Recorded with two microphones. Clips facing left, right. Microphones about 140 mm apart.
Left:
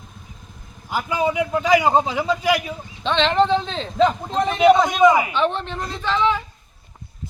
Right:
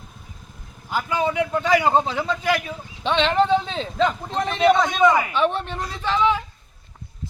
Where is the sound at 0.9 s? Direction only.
15° left (ahead or behind).